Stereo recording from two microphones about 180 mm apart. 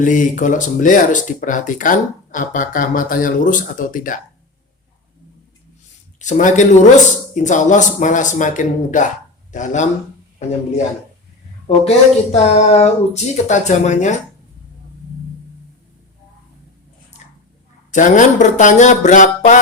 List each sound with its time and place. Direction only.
0.0 s speech: 45° left (ahead or behind)
6.1 s speech: 45° left (ahead or behind)
11.7 s speech: 35° left (ahead or behind)
17.9 s speech: 45° left (ahead or behind)